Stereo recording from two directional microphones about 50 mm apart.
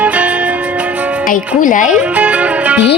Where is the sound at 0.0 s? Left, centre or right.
Right.